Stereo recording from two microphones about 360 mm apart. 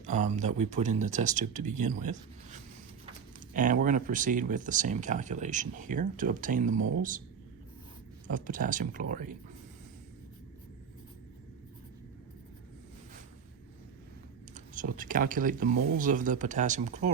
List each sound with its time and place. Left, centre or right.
0.0 s speech: centre
3.5 s speech: right
8.3 s speech: right
14.5 s speech: right